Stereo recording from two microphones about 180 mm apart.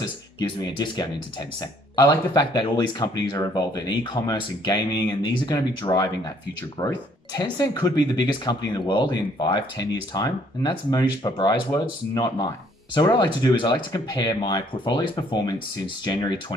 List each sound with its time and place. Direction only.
0.4 s speech: 25° left (ahead or behind)